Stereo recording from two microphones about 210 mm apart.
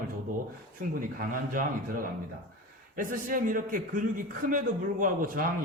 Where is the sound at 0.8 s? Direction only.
40° right (ahead or behind).